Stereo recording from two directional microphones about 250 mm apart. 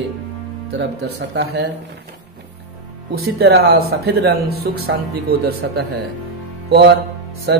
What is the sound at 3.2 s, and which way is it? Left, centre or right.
A man's voice, right.